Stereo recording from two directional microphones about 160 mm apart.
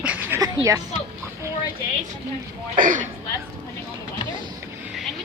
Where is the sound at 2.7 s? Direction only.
55° right (ahead or behind).